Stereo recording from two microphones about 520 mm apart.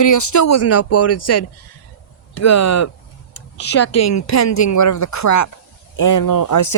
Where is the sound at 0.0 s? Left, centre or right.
Left.